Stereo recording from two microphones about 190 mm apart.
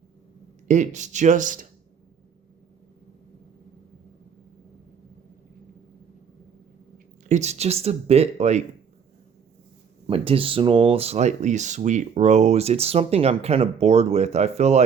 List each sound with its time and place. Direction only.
0.7 s speech: 40° right (ahead or behind)
7.3 s speech: 35° right (ahead or behind)
10.1 s speech: 30° right (ahead or behind)